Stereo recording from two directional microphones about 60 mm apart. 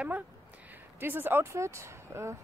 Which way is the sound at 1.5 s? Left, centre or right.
Right.